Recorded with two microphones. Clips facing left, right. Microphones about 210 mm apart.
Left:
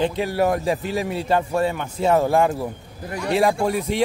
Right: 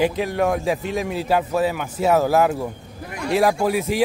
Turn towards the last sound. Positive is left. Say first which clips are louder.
# right 1 dB
turn(degrees=0)  # may be behind; listen again after turning